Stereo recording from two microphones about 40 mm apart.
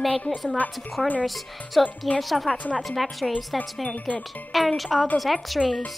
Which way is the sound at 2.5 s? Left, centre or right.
Left.